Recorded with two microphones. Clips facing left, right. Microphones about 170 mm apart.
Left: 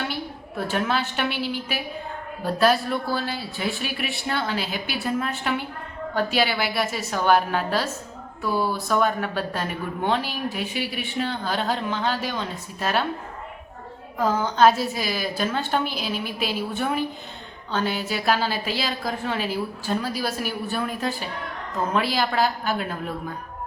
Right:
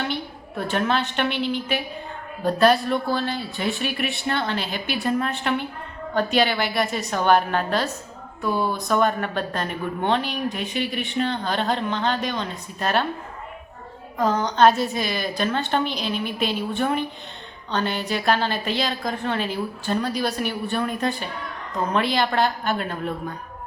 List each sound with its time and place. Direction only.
0.1 s a woman's voice: 5° left (ahead or behind)
8.5 s speech: 20° right (ahead or behind)
8.9 s a woman's voice: 5° left (ahead or behind)
14.2 s a woman's voice: 5° left (ahead or behind)